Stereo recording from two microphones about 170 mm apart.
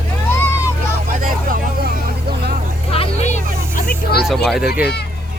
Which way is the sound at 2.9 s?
35° left (ahead or behind).